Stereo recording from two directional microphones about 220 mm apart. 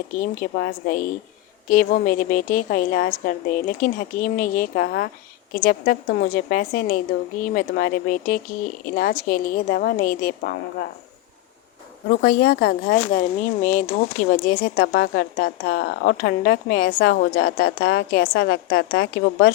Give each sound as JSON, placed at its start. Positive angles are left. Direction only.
{"t": 0.5, "sound": "a woman's voice", "side_deg": 40}
{"t": 12.0, "sound": "speech", "side_deg": 45}